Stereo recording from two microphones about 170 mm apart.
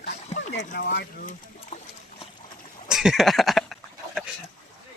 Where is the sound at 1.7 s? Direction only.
45° left (ahead or behind).